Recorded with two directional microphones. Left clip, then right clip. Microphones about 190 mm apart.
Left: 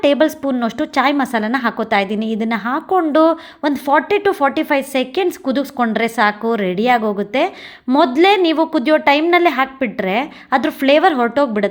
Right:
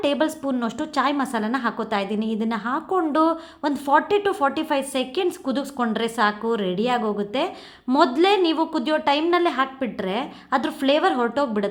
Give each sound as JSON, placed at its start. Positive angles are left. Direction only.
{"t": 0.0, "sound": "a woman's voice", "side_deg": 25}